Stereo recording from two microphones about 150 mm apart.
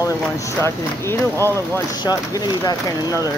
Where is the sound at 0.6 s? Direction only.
15° left (ahead or behind).